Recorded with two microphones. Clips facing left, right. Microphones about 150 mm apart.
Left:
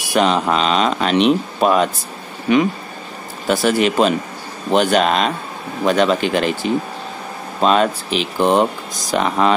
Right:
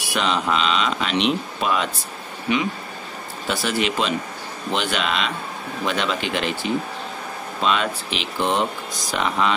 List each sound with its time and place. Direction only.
0.1 s speech: 45° left (ahead or behind)
7.6 s speech: 40° left (ahead or behind)